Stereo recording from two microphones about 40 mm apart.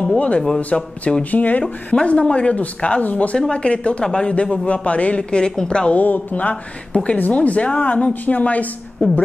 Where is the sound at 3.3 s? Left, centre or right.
Left.